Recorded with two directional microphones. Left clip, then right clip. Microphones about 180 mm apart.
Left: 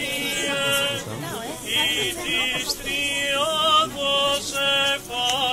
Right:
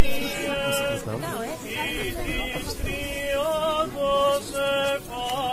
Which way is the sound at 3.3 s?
15° right (ahead or behind).